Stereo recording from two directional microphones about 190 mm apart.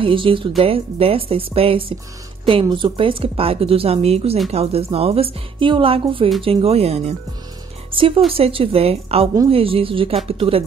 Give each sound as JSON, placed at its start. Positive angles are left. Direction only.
{"t": 0.0, "sound": "a woman's voice", "side_deg": -25}
{"t": 7.9, "sound": "music", "side_deg": -25}
{"t": 8.3, "sound": "a woman's voice", "side_deg": -30}